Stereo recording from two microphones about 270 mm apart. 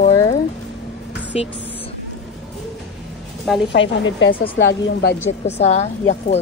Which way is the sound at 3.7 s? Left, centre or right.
Left.